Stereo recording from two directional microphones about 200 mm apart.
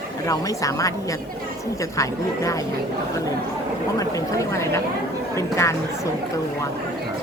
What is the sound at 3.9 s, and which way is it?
Speech, 15° left (ahead or behind).